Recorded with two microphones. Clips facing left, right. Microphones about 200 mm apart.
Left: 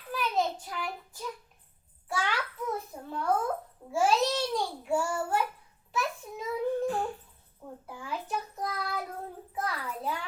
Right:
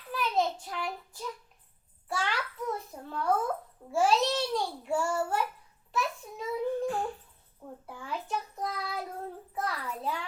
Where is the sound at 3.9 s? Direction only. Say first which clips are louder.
Even; centre (ahead or behind).